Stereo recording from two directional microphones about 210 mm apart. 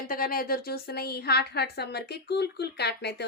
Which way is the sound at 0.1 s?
45° left (ahead or behind).